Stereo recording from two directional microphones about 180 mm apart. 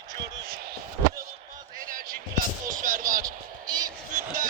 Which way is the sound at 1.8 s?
50° right (ahead or behind).